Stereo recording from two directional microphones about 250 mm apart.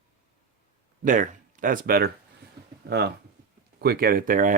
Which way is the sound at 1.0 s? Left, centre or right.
Right.